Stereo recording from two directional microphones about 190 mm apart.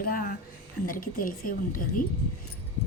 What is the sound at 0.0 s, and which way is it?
A woman's voice, 50° left (ahead or behind).